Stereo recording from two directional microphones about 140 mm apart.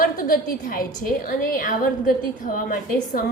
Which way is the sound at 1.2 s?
75° left (ahead or behind).